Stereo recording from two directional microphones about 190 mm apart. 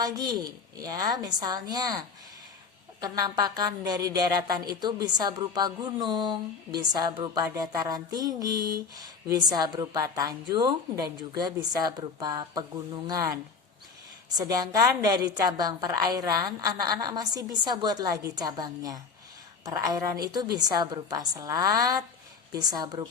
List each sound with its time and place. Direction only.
0.0 s speech: 20° right (ahead or behind)